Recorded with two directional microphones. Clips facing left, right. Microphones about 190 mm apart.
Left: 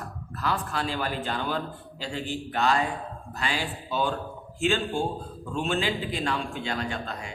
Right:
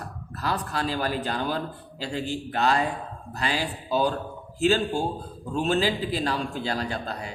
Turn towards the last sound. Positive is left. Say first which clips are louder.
# right 2 dB
turn(degrees=-35)  # may be behind; listen again after turning